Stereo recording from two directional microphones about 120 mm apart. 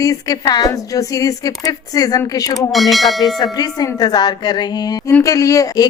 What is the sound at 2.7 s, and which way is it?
Speech, centre (ahead or behind).